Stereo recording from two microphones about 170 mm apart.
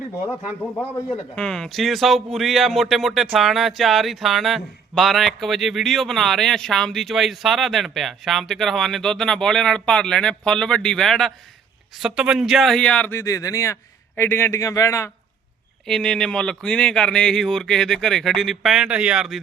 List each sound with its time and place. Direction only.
0.3 s speech: 15° left (ahead or behind)
15.9 s speech: 5° left (ahead or behind)